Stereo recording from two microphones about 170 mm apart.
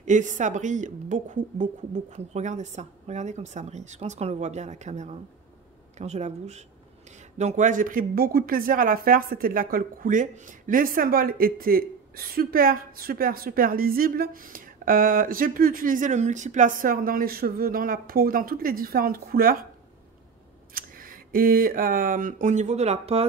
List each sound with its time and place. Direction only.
0.0 s a woman's voice: 45° right (ahead or behind)
20.7 s speech: 55° right (ahead or behind); by 23.2 s 40° right (ahead or behind)